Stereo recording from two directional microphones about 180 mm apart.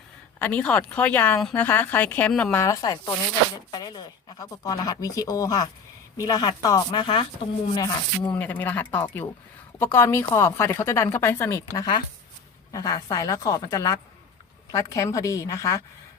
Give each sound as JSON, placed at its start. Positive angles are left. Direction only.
{"t": 0.3, "sound": "speech", "side_deg": 10}
{"t": 8.3, "sound": "speech", "side_deg": 10}